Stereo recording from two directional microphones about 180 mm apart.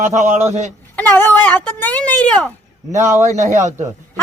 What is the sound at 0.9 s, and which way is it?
Speech, 10° left (ahead or behind).